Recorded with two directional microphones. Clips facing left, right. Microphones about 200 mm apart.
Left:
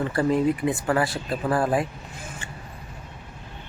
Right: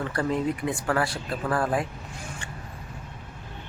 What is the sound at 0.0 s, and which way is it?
Speech, 5° left (ahead or behind).